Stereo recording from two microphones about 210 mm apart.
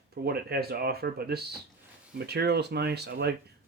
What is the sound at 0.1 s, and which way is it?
Speech, 50° right (ahead or behind).